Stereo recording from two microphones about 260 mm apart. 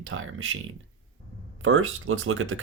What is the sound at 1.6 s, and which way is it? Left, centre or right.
Speech, right.